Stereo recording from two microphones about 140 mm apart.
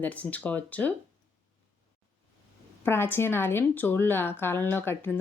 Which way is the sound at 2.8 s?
15° left (ahead or behind).